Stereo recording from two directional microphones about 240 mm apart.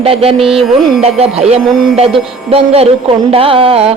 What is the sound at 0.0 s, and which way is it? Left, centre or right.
Music, right.